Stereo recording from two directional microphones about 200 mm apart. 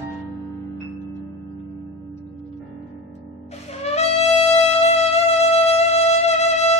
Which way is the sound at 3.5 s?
30° left (ahead or behind).